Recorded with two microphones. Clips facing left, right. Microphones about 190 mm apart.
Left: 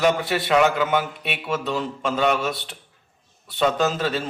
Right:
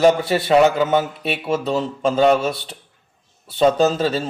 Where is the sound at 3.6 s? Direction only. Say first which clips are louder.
Right 5 dB; 30° right (ahead or behind).